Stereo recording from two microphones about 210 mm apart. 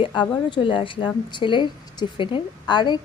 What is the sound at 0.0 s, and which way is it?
A woman's voice, 25° left (ahead or behind).